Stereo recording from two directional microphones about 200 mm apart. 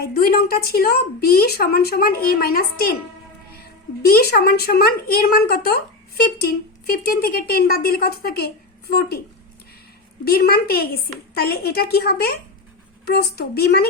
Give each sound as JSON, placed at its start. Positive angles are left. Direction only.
{"t": 0.0, "sound": "a woman's voice", "side_deg": 50}
{"t": 4.0, "sound": "a woman's voice", "side_deg": 50}
{"t": 10.2, "sound": "a woman's voice", "side_deg": 50}